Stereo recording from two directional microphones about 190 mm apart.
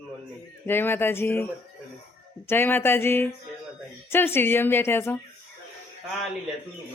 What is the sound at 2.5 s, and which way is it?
A woman's voice, 10° left (ahead or behind).